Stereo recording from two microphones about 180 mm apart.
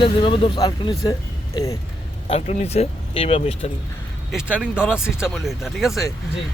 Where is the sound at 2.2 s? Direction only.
35° left (ahead or behind).